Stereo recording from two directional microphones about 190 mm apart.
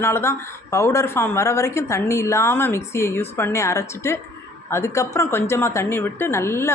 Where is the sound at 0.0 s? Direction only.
15° left (ahead or behind).